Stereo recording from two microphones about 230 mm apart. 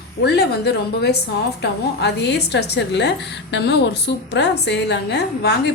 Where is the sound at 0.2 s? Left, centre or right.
Left.